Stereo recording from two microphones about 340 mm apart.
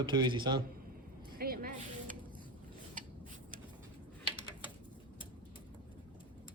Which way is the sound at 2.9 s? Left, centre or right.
Right.